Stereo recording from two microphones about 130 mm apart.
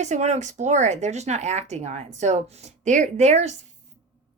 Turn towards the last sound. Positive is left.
turn(degrees=-60)  # may be behind; listen again after turning